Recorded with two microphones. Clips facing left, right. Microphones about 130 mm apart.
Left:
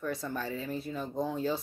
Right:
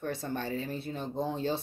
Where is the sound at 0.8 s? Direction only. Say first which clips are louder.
Even; 30° right (ahead or behind).